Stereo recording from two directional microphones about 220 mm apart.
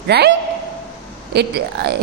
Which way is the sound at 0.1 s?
50° right (ahead or behind).